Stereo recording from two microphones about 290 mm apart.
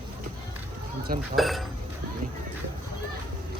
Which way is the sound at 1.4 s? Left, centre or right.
Centre.